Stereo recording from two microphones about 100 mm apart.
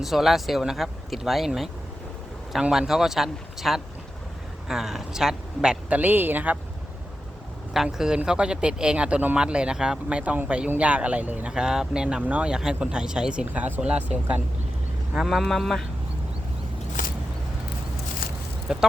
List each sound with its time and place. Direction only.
0.0 s speech: centre (ahead or behind)
6.0 s speech: 20° right (ahead or behind)
7.7 s speech: 5° right (ahead or behind)
15.1 s speech: 5° right (ahead or behind)
18.7 s speech: 5° right (ahead or behind)